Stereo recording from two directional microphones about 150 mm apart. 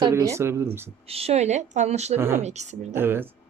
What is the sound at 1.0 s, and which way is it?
Speech, 40° right (ahead or behind).